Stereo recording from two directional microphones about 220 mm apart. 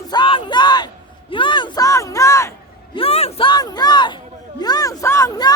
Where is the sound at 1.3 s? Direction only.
20° left (ahead or behind).